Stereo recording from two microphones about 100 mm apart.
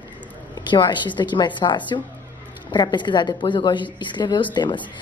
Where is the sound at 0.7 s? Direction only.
50° left (ahead or behind).